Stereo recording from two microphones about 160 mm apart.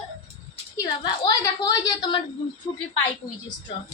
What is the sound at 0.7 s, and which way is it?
A woman's voice, 25° left (ahead or behind).